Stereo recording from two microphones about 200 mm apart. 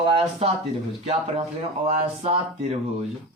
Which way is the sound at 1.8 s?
35° right (ahead or behind).